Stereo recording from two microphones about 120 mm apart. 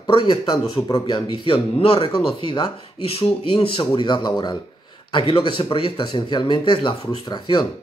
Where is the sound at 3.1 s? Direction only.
55° left (ahead or behind).